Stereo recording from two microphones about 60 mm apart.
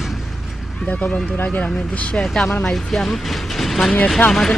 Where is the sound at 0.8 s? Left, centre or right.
Left.